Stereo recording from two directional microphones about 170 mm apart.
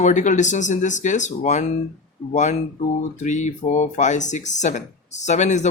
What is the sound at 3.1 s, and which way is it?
Speech, 45° left (ahead or behind).